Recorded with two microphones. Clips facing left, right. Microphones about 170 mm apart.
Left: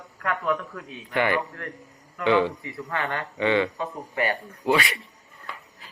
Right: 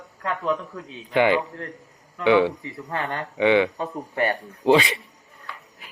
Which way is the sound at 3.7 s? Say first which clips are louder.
Right 2 dB; 40° right (ahead or behind).